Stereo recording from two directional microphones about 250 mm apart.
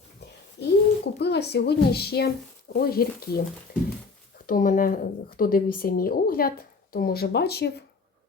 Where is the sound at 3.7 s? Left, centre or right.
Left.